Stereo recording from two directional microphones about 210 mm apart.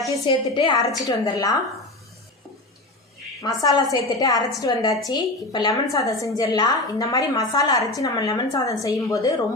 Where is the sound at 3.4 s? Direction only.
15° left (ahead or behind).